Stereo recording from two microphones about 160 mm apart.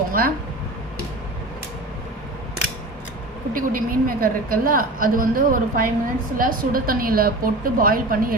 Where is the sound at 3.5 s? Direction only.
60° right (ahead or behind).